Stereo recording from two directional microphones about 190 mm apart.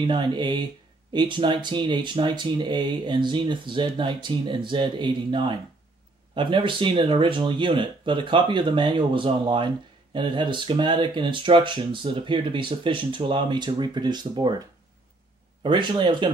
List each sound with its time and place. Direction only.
0.0 s speech: 25° right (ahead or behind)
15.6 s speech: 25° right (ahead or behind)